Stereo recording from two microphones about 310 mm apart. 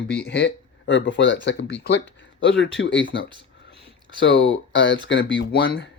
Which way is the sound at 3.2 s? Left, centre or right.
Centre.